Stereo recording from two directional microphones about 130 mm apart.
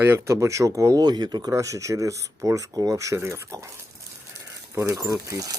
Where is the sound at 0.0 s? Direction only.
20° right (ahead or behind).